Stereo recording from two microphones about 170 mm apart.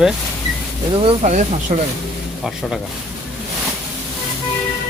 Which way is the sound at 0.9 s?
30° right (ahead or behind).